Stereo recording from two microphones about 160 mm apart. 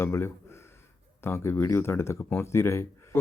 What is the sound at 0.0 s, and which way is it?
Speech, 15° left (ahead or behind).